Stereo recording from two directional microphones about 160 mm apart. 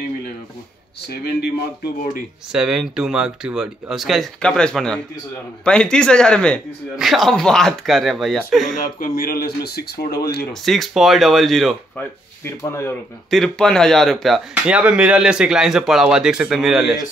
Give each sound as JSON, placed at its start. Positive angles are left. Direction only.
{"t": 2.5, "sound": "speech", "side_deg": -5}
{"t": 8.7, "sound": "speech", "side_deg": 65}
{"t": 10.5, "sound": "speech", "side_deg": 0}
{"t": 12.4, "sound": "speech", "side_deg": 15}
{"t": 13.3, "sound": "speech", "side_deg": 5}